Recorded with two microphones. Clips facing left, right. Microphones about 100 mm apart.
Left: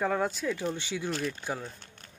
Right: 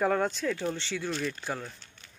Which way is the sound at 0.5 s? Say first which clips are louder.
Even; 15° left (ahead or behind).